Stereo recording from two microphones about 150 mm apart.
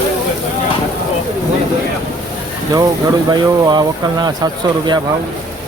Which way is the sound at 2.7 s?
25° right (ahead or behind).